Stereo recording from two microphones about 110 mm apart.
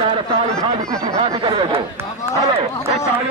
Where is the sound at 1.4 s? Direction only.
55° right (ahead or behind).